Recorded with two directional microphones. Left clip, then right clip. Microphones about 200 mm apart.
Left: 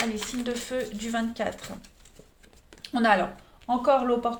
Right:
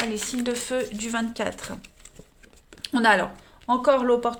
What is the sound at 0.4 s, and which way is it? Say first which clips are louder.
A woman's voice: right 4 dB; 50° right (ahead or behind).